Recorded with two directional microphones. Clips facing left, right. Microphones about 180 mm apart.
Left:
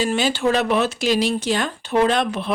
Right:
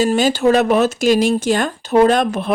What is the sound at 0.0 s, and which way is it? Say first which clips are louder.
Speech: right 5 dB; 45° right (ahead or behind).